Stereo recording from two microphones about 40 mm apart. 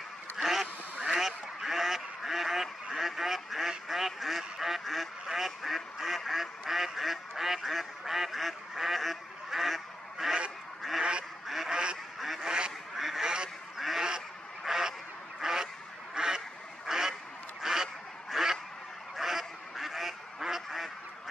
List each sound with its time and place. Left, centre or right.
0.4 s goose: centre
5.2 s duck: centre
5.6 s quack: centre
5.9 s duck: centre
11.0 s goose: right
11.4 s duck: centre
11.7 s duck: right
12.4 s quack: centre
12.9 s duck: centre
13.2 s duck: centre
13.7 s duck: centre
14.6 s goose: centre
17.6 s honk: centre
18.3 s goose: centre